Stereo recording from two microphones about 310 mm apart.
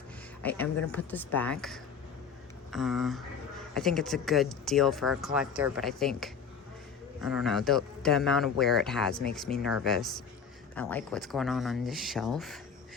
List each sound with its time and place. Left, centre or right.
0.4 s speech: centre